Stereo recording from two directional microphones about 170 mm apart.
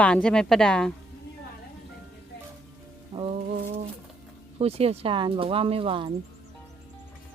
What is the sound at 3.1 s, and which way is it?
Music, 30° right (ahead or behind).